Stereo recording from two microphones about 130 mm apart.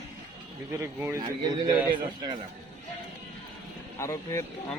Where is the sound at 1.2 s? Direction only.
35° right (ahead or behind).